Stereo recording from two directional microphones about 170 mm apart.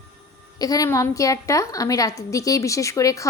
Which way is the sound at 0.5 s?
20° left (ahead or behind).